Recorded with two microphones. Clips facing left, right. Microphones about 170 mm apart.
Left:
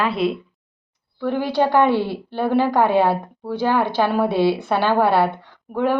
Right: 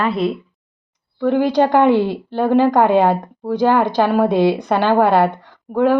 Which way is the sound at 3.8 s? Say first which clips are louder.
Right 4 dB; 15° right (ahead or behind).